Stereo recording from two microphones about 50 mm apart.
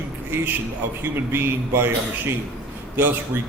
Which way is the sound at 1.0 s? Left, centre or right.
Right.